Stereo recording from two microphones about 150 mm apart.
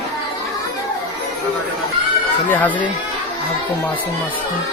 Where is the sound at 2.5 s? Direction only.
10° left (ahead or behind).